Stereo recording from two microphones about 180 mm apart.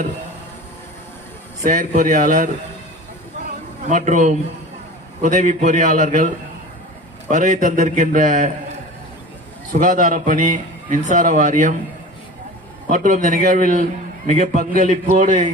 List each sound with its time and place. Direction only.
1.6 s a man's voice: 45° right (ahead or behind)
3.4 s a sound: 45° right (ahead or behind)
5.2 s a man's voice: 45° right (ahead or behind)
9.7 s a man's voice: 45° right (ahead or behind)
12.9 s a man's voice: 50° right (ahead or behind)